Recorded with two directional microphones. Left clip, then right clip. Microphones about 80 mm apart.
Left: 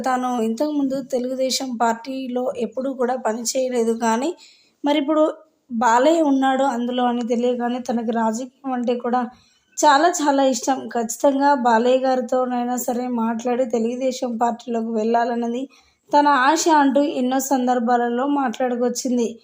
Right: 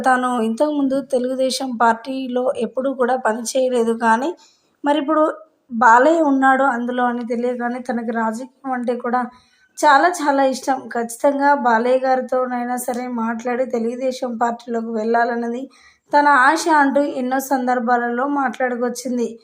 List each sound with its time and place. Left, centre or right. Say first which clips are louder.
0.2 s speech: right 3 dB; right
4.1 s speech: right 4 dB; centre
5.8 s a woman's voice: right 4 dB; centre
6.2 s speech: right 4 dB; centre
7.3 s a woman's voice: left 1 dB; left